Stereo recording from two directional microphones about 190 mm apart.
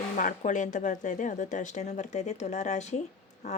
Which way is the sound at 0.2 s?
40° left (ahead or behind).